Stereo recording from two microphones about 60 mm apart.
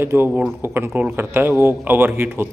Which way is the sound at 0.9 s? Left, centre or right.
Right.